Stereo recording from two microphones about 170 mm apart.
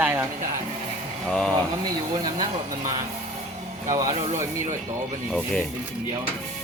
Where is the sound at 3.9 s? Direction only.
20° right (ahead or behind).